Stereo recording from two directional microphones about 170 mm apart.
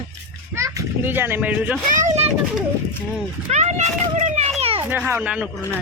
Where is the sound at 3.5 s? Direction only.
40° right (ahead or behind).